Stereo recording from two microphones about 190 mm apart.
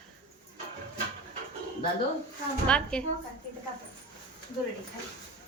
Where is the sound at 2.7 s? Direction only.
5° left (ahead or behind).